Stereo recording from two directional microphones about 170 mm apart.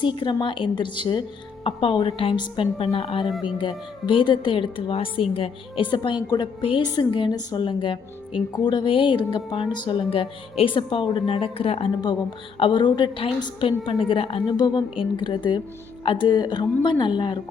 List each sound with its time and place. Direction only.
0.0 s a woman's voice: 30° left (ahead or behind)